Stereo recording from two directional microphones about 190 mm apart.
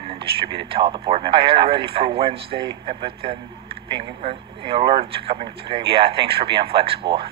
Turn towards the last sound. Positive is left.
turn(degrees=-30)  # may be behind; listen again after turning